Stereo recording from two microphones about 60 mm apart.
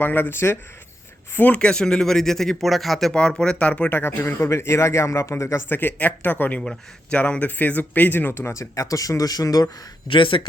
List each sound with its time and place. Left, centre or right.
0.0 s speech: left
1.5 s speech: centre
3.1 s speech: centre
4.0 s speech: left
5.6 s speech: left